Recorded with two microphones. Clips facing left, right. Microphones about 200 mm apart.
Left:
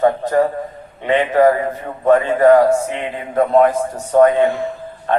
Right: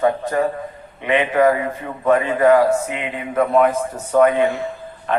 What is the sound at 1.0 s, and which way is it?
A man's voice, 35° left (ahead or behind).